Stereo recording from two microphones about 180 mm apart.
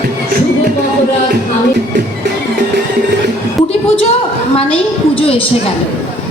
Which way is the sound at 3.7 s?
35° left (ahead or behind).